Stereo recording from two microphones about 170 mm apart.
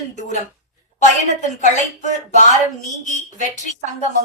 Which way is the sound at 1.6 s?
45° left (ahead or behind).